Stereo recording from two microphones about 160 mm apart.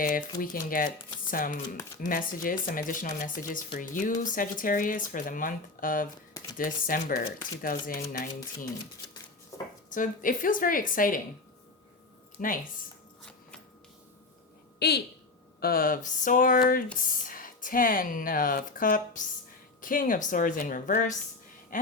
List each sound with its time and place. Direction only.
0.0 s speech: 60° left (ahead or behind)
9.9 s speech: 55° left (ahead or behind)
12.4 s speech: 55° left (ahead or behind)
14.8 s a woman's voice: 90° left
15.6 s speech: 65° left (ahead or behind)
21.7 s gasp: 55° left (ahead or behind)